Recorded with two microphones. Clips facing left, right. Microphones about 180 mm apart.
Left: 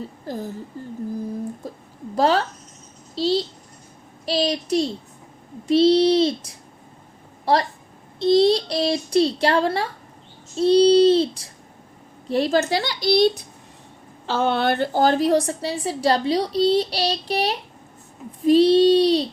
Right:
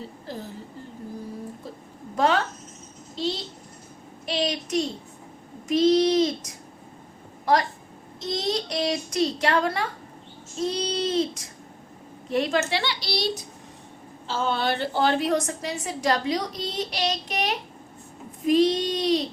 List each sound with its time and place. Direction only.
0.3 s a woman's voice: 45° left (ahead or behind)
2.1 s a woman's voice: 35° left (ahead or behind); by 13.4 s 50° left (ahead or behind)
14.3 s a woman's voice: 65° left (ahead or behind); by 19.3 s 30° left (ahead or behind)